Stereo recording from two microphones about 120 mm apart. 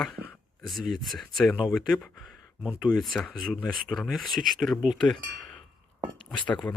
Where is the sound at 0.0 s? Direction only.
5° left (ahead or behind).